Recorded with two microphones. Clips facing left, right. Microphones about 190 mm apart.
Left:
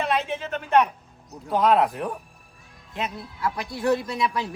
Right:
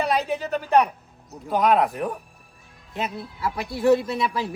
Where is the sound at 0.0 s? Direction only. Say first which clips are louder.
Right 2 dB; 35° right (ahead or behind).